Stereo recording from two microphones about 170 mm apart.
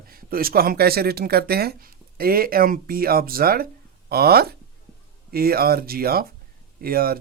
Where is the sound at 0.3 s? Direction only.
60° right (ahead or behind).